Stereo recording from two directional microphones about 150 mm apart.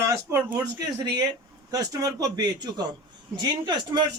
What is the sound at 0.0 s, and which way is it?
A man's voice, 20° right (ahead or behind).